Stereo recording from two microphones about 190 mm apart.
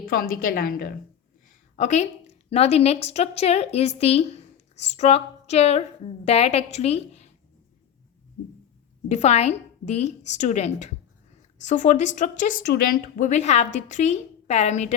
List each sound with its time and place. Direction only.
0.0 s a woman's voice: 50° left (ahead or behind)
1.7 s a woman's voice: 40° left (ahead or behind)
9.0 s a woman's voice: 35° left (ahead or behind)